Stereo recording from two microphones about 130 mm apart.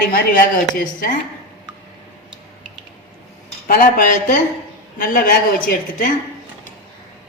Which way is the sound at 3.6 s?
90° left.